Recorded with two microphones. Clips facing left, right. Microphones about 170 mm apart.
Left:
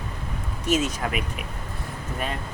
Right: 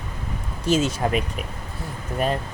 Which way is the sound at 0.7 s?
30° right (ahead or behind).